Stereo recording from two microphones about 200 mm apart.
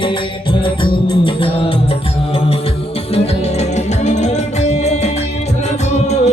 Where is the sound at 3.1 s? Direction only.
30° left (ahead or behind).